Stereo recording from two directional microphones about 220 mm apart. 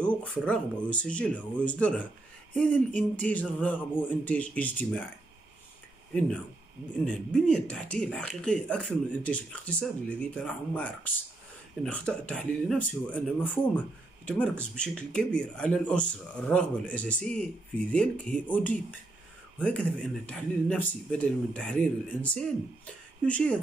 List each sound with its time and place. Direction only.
0.0 s speech: 5° left (ahead or behind)
7.1 s speech: 5° left (ahead or behind)